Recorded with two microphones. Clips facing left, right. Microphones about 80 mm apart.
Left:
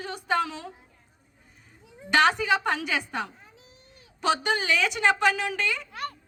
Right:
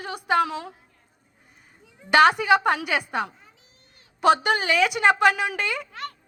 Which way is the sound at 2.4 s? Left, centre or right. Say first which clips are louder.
Right 5 dB; right.